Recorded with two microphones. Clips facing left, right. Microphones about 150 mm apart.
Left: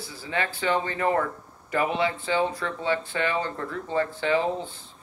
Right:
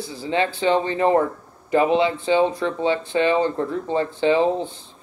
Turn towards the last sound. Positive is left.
turn(degrees=-20)  # may be behind; listen again after turning